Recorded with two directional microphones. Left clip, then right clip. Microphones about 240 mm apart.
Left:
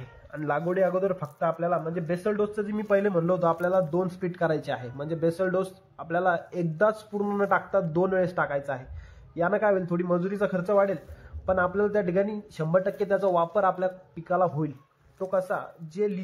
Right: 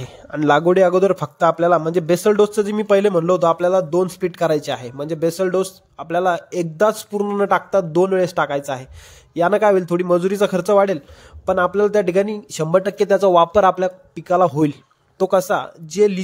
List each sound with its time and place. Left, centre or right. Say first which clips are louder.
0.3 s a man's voice: right 13 dB; right